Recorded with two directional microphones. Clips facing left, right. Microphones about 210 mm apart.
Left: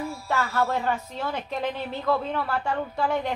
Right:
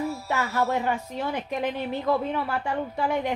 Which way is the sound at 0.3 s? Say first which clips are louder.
Left 1 dB; 20° right (ahead or behind).